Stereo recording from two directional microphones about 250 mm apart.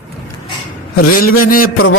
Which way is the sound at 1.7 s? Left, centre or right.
Left.